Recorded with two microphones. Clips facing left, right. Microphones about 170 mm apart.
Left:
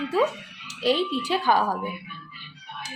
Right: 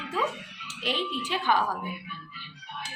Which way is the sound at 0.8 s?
35° left (ahead or behind).